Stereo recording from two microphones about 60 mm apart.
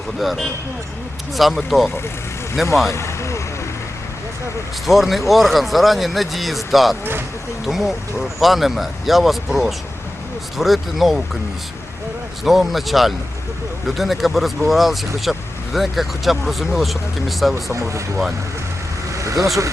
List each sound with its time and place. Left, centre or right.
0.2 s speech: centre
2.9 s vehicle: left
4.9 s speech: centre
12.5 s speech: centre
17.5 s speech: right
19.1 s vehicle: right